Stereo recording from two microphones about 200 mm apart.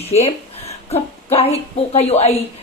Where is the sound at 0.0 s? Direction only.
30° left (ahead or behind).